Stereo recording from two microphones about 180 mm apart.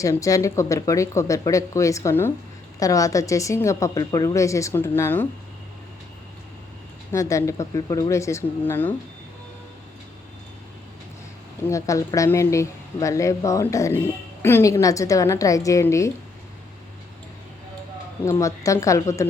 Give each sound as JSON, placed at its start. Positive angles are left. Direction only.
{"t": 0.0, "sound": "speech", "side_deg": 20}
{"t": 7.1, "sound": "speech", "side_deg": 15}
{"t": 11.6, "sound": "speech", "side_deg": 15}
{"t": 18.3, "sound": "speech", "side_deg": 15}